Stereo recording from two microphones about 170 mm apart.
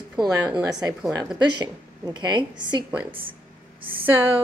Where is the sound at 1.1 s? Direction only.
20° right (ahead or behind).